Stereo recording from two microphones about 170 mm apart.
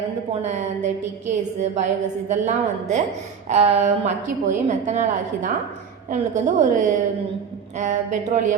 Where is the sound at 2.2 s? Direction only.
45° right (ahead or behind).